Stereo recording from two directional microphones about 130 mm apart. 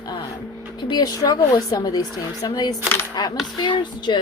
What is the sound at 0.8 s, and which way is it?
Speech, 30° left (ahead or behind).